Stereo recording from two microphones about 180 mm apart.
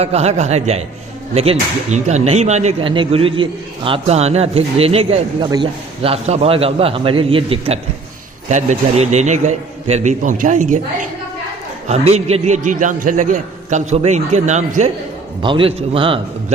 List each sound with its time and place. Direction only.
0.0 s a man's voice: 35° right (ahead or behind)
8.4 s a man's voice: 40° right (ahead or behind)
15.4 s a man's voice: 25° right (ahead or behind)